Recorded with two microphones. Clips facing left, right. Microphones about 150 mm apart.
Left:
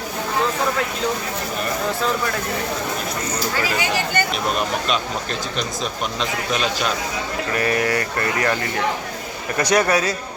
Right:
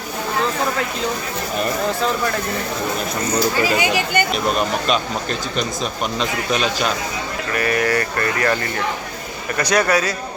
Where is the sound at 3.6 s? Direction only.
15° right (ahead or behind).